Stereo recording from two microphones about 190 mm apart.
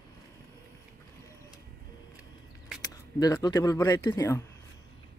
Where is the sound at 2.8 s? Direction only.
20° left (ahead or behind).